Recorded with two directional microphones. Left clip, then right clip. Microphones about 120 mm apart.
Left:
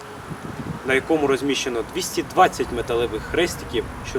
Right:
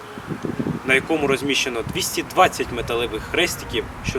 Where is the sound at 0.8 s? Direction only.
5° right (ahead or behind).